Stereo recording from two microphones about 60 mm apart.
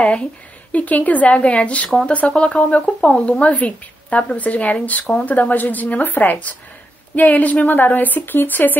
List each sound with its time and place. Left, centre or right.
0.0 s a woman's voice: centre